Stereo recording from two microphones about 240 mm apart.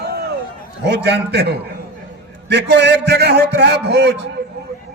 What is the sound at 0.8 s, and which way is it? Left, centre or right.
A man's voice, right.